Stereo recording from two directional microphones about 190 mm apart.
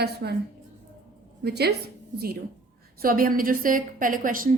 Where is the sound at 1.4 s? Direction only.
60° right (ahead or behind).